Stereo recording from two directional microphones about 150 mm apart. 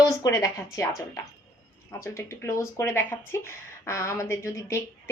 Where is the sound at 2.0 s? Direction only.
20° left (ahead or behind).